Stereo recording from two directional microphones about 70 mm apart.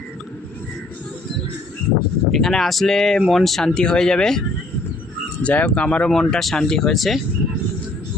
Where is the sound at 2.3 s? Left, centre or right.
Centre.